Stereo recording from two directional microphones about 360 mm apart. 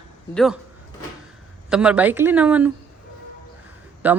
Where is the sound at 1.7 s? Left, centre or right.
Centre.